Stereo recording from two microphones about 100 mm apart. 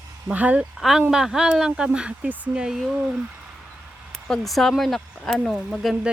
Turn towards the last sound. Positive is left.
turn(degrees=0)  # may be behind; listen again after turning